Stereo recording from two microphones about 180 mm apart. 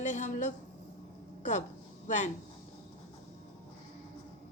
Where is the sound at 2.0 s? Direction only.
40° left (ahead or behind).